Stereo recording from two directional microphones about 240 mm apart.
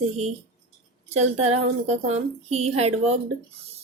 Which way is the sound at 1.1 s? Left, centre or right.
Right.